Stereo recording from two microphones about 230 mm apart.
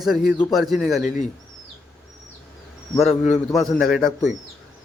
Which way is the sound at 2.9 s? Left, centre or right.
Centre.